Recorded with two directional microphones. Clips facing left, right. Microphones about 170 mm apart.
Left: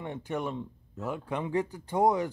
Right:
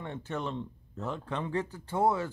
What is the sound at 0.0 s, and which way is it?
Speech, 15° left (ahead or behind).